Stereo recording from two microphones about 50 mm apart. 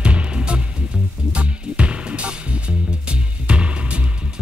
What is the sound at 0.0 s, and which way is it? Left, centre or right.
Music, right.